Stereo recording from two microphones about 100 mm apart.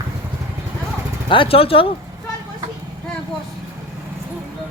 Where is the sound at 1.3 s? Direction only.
65° left (ahead or behind).